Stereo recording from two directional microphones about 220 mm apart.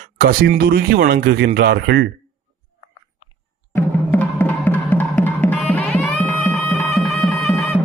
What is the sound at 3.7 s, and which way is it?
Music, 10° left (ahead or behind).